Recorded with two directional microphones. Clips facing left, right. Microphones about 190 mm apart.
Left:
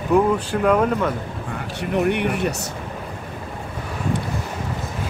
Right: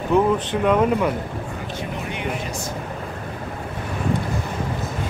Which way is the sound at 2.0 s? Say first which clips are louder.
Left 11 dB; 65° left (ahead or behind).